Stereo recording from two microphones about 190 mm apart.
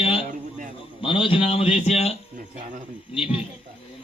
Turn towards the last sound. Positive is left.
turn(degrees=30)  # may be behind; listen again after turning